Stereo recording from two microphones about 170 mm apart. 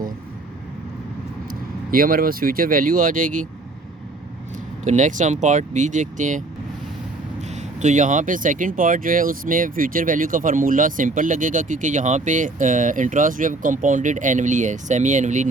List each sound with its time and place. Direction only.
1.9 s speech: 60° right (ahead or behind)
4.9 s speech: 45° right (ahead or behind)
7.4 s speech: 45° right (ahead or behind)